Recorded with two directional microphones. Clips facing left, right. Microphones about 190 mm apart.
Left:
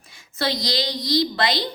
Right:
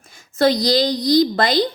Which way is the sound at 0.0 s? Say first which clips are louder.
Right 10 dB; 45° right (ahead or behind).